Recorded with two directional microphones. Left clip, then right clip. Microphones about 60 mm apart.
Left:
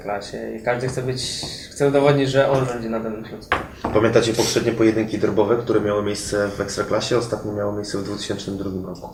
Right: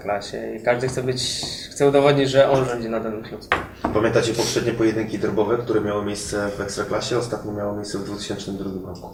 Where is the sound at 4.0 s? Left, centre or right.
Centre.